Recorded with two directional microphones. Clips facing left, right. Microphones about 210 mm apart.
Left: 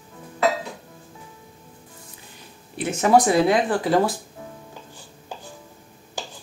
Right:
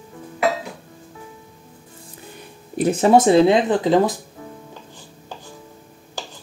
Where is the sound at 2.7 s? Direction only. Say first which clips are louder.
Right 3 dB; 35° right (ahead or behind); by 4.1 s 20° right (ahead or behind).